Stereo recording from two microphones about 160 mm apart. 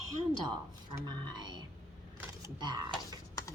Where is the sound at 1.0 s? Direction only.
25° right (ahead or behind).